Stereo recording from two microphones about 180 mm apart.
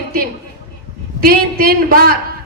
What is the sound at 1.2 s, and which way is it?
Speech, 55° right (ahead or behind).